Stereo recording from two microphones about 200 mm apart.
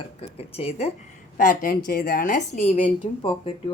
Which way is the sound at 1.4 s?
45° left (ahead or behind).